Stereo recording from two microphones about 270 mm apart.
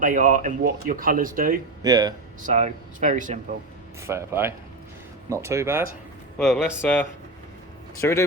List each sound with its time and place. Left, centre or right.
0.0 s speech: right
1.8 s speech: centre
2.4 s speech: right
4.0 s speech: centre